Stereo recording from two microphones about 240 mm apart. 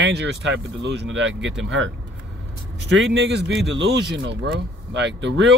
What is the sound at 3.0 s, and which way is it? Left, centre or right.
Speech, right.